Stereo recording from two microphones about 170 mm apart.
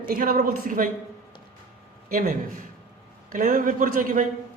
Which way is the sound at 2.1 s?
55° right (ahead or behind).